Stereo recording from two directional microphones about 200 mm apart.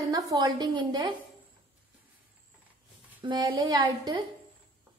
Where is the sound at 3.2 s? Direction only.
20° right (ahead or behind).